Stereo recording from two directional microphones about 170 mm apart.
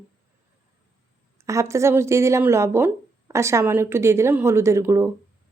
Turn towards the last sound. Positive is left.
turn(degrees=-15)  # may be behind; listen again after turning